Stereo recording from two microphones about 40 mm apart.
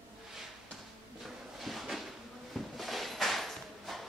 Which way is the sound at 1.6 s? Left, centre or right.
Centre.